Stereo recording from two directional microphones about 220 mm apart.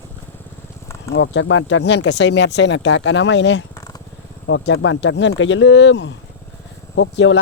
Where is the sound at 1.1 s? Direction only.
55° left (ahead or behind).